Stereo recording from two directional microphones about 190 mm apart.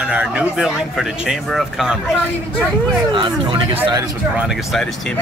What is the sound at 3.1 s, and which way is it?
Speech, 25° right (ahead or behind).